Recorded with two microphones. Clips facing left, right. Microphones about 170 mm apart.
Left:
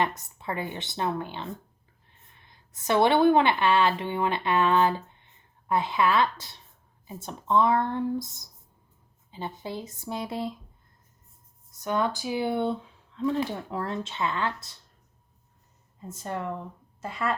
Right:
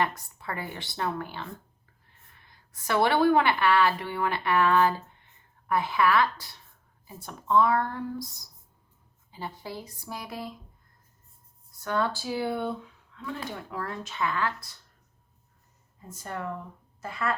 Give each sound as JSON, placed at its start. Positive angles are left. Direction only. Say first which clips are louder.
{"t": 0.0, "sound": "a woman's voice", "louder": "left 1 dB", "side_deg": 20}
{"t": 11.7, "sound": "speech", "louder": "left 1 dB", "side_deg": 20}
{"t": 16.0, "sound": "speech", "louder": "left 3 dB", "side_deg": 20}